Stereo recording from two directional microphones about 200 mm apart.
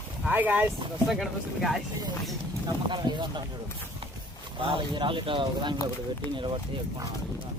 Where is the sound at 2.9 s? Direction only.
20° right (ahead or behind).